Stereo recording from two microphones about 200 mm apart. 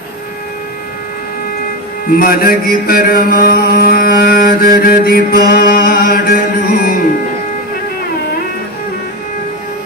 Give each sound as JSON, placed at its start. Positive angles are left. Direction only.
{"t": 2.1, "sound": "mantra", "side_deg": 45}